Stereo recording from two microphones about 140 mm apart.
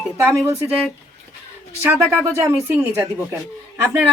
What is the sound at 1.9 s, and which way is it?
Speech, 10° right (ahead or behind).